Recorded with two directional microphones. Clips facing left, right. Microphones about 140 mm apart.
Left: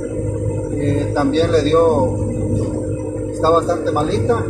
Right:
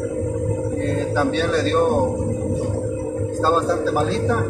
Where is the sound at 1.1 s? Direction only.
30° left (ahead or behind).